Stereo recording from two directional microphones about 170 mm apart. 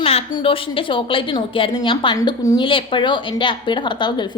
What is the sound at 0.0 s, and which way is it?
A woman's voice, 35° left (ahead or behind).